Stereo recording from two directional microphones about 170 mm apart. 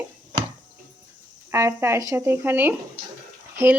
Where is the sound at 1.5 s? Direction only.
15° right (ahead or behind).